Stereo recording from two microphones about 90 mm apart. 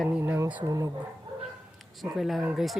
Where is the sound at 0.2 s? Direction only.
30° right (ahead or behind).